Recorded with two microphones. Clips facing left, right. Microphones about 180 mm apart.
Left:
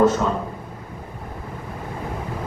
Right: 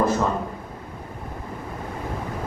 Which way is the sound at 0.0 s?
90° left.